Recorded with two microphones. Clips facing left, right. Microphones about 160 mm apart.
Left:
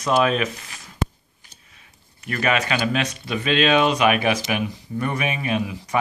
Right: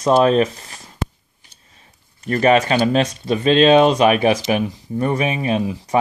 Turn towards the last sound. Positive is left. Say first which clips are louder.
# right 5 dB
turn(degrees=-30)  # may be behind; listen again after turning